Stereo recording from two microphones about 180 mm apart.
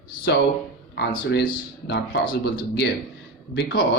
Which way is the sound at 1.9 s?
65° left (ahead or behind).